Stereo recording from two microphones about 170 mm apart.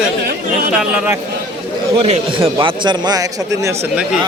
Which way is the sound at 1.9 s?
35° right (ahead or behind).